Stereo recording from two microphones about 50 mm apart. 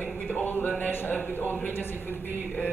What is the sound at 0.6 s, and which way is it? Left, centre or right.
Speech, left.